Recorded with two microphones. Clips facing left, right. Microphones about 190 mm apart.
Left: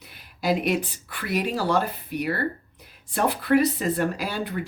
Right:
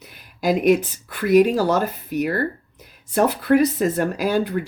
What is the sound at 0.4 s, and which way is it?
Speech, 45° right (ahead or behind).